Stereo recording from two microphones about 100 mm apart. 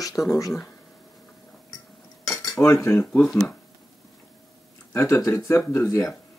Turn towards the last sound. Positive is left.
turn(degrees=25)  # may be behind; listen again after turning